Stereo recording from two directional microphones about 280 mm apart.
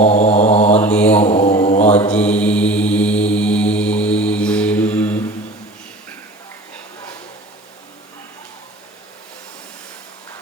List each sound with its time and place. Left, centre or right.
0.0 s mantra: left
0.8 s mantra: centre
1.3 s mantra: left
2.0 s mantra: centre